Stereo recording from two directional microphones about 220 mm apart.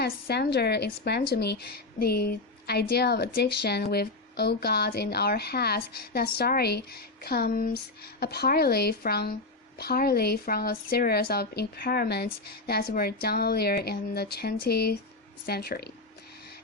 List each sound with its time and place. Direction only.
0.0 s speech: 50° left (ahead or behind)